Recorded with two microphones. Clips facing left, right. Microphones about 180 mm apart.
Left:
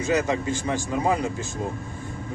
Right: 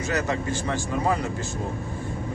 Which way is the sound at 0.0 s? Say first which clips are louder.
Left 3 dB; 15° left (ahead or behind).